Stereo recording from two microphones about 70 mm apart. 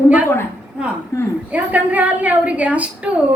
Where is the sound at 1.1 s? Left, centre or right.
Left.